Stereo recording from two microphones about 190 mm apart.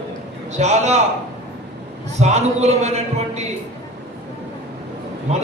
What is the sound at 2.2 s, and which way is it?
A man's voice, 35° right (ahead or behind).